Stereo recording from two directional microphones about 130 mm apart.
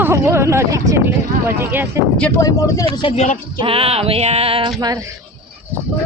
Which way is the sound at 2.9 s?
40° left (ahead or behind).